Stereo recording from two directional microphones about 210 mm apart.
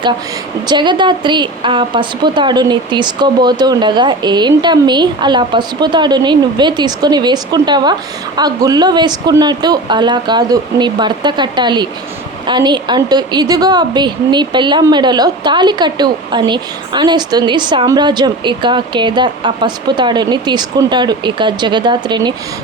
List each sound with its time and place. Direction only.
0.7 s a woman's voice: 20° right (ahead or behind)